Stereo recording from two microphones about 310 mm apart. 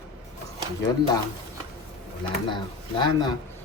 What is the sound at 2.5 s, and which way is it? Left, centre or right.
Speech, centre.